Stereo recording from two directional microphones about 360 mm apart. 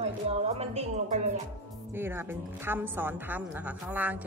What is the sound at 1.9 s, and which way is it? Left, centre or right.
A woman's voice, centre.